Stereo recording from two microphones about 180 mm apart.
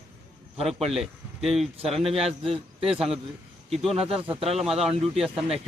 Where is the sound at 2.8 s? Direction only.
5° right (ahead or behind).